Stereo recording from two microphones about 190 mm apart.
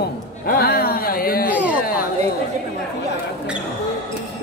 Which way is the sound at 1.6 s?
10° right (ahead or behind).